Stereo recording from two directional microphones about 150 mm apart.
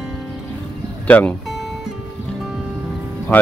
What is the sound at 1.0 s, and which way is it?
Speech, 10° left (ahead or behind).